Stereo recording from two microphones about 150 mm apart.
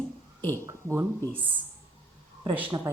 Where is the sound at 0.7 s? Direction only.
15° right (ahead or behind).